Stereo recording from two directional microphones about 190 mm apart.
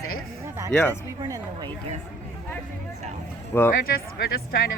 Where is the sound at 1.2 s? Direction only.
20° right (ahead or behind).